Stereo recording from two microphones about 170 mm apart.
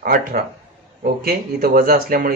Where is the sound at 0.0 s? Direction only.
60° right (ahead or behind).